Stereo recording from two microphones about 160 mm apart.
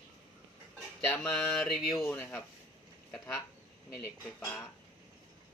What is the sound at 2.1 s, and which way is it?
Speech, 10° left (ahead or behind).